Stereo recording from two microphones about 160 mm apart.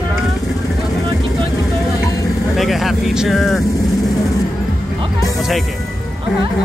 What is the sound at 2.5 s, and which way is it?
Speech, centre (ahead or behind).